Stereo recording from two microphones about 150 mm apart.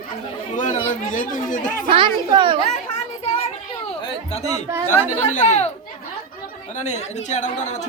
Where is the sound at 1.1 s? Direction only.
60° left (ahead or behind).